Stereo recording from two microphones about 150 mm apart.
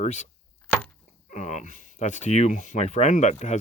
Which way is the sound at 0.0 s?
50° left (ahead or behind).